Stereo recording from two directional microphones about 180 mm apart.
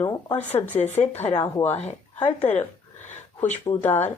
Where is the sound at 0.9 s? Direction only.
10° left (ahead or behind).